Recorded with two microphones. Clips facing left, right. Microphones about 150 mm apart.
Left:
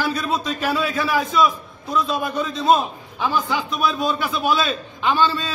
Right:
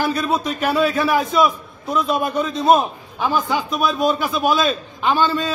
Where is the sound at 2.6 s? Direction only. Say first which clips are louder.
Right 2 dB; 50° right (ahead or behind).